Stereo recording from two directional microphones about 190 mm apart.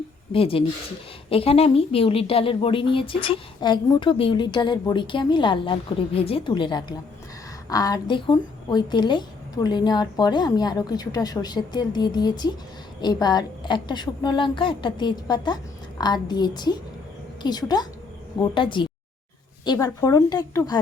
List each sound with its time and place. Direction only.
0.3 s a woman's voice: 30° left (ahead or behind)